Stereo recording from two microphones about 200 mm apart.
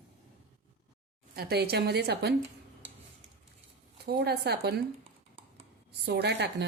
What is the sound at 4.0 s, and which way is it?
Speech, 50° right (ahead or behind).